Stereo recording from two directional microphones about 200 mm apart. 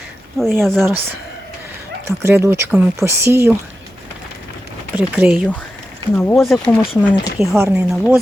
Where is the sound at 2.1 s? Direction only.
15° right (ahead or behind).